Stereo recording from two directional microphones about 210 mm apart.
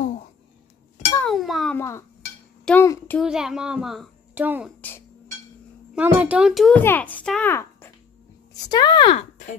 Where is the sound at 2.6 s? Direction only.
10° left (ahead or behind).